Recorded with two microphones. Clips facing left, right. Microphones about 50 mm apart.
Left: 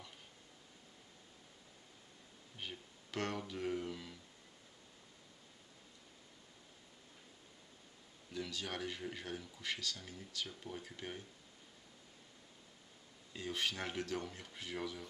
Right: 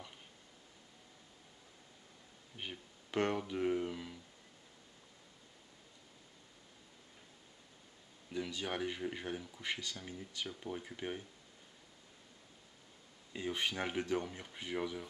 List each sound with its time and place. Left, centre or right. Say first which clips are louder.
2.5 s speech: right 2 dB; centre
8.3 s speech: right 4 dB; centre
13.3 s speech: right 2 dB; centre